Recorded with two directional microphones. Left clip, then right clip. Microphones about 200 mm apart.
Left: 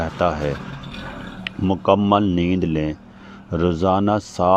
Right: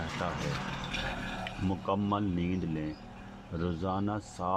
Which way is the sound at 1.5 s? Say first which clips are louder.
Left 17 dB; 45° left (ahead or behind).